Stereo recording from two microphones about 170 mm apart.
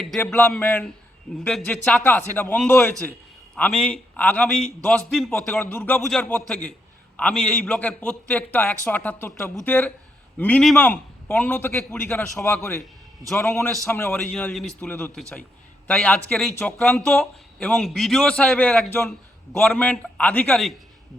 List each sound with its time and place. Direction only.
0.2 s a man's voice: 10° left (ahead or behind)
12.8 s a man's voice: centre (ahead or behind)
14.2 s a man's voice: 5° left (ahead or behind)